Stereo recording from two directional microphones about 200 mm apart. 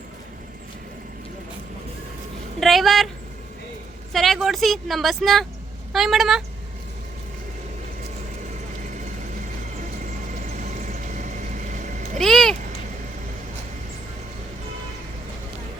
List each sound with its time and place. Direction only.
2.6 s a sound: centre (ahead or behind)
4.1 s speech: centre (ahead or behind)
10.6 s vehicle: 40° right (ahead or behind)
12.2 s speech: centre (ahead or behind)